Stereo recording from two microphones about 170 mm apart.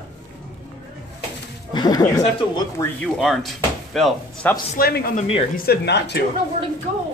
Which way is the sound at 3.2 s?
Centre (ahead or behind).